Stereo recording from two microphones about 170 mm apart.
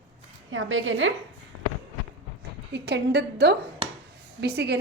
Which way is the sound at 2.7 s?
90° right.